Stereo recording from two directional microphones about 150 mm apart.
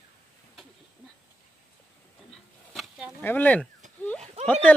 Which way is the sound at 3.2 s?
10° left (ahead or behind).